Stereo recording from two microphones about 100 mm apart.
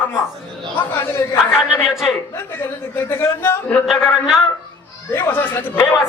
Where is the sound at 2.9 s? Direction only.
20° left (ahead or behind).